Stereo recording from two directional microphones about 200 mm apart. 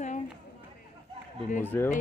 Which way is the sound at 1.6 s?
10° left (ahead or behind).